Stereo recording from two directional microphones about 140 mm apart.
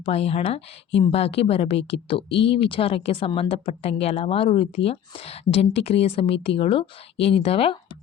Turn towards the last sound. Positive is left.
turn(degrees=40)  # may be behind; listen again after turning